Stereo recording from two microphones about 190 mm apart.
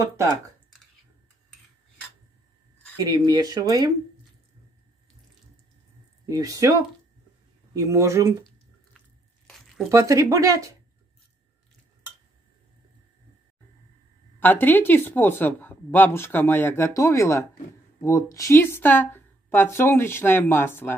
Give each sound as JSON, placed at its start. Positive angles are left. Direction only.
{"t": 3.0, "sound": "speech", "side_deg": -20}
{"t": 6.2, "sound": "speech", "side_deg": -20}
{"t": 9.8, "sound": "speech", "side_deg": -15}
{"t": 14.4, "sound": "speech", "side_deg": 10}